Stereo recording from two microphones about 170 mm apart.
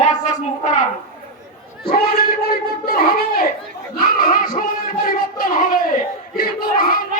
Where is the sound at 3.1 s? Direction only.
60° left (ahead or behind).